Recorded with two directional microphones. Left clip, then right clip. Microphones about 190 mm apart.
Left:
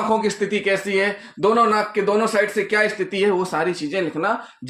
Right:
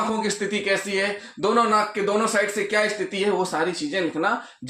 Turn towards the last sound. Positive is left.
turn(degrees=35)  # may be behind; listen again after turning